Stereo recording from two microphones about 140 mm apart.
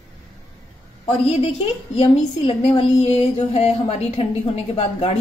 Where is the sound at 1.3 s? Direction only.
45° left (ahead or behind).